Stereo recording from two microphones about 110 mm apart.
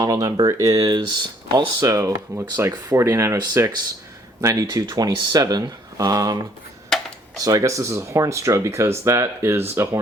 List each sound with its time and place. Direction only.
0.0 s speech: 30° right (ahead or behind)
6.9 s a sound: 5° left (ahead or behind)
7.3 s speech: 35° right (ahead or behind)